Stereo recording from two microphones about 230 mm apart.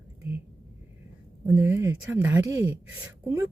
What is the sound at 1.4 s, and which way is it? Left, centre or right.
Speech, centre.